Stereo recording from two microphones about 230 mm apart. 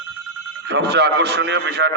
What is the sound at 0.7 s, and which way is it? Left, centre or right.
A man's voice, right.